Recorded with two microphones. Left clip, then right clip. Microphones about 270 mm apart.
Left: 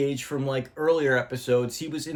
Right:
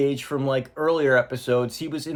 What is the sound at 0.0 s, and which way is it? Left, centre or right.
Speech, centre.